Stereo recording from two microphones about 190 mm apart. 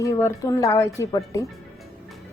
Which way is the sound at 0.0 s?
15° left (ahead or behind).